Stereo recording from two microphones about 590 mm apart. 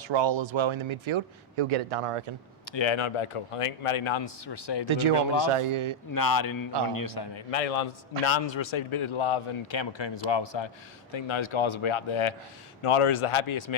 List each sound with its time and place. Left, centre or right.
0.0 s speech: right
2.6 s a man's voice: left
4.9 s a man's voice: right
6.1 s speech: left
7.3 s a man's voice: left
8.2 s a man's voice: left